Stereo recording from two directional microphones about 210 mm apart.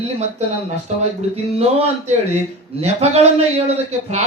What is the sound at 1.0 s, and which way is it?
A man's voice, 30° right (ahead or behind).